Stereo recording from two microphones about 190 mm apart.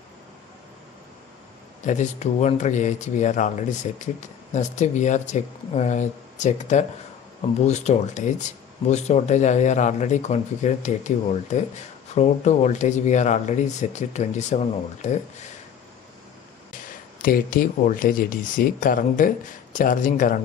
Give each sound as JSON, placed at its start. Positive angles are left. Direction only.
{"t": 1.8, "sound": "speech", "side_deg": 40}
{"t": 17.2, "sound": "speech", "side_deg": 45}